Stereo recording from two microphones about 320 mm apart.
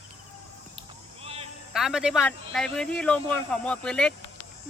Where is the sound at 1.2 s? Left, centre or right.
Centre.